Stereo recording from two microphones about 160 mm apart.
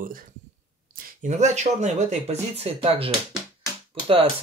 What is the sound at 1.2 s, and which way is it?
Speech, 50° right (ahead or behind).